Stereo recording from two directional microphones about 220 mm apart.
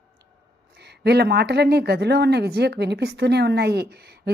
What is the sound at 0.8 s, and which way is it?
Speech, 50° right (ahead or behind).